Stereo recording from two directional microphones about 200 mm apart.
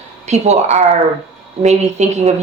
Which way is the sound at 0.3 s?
35° right (ahead or behind).